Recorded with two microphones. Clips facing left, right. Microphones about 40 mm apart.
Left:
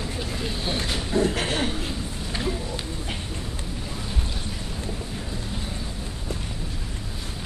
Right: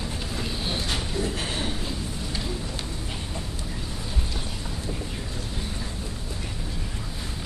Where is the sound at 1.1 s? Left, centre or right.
Left.